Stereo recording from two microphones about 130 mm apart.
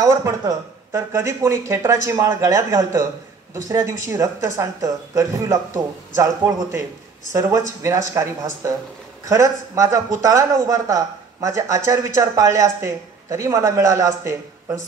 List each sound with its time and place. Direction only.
0.0 s speech: 25° right (ahead or behind)